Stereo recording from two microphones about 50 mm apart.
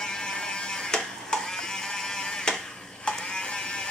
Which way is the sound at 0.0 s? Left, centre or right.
Centre.